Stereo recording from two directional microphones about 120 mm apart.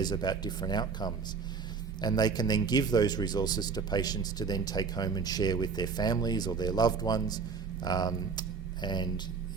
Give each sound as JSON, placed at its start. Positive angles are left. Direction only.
{"t": 0.0, "sound": "speech", "side_deg": 35}